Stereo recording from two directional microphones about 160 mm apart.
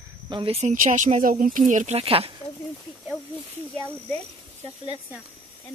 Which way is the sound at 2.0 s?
35° right (ahead or behind).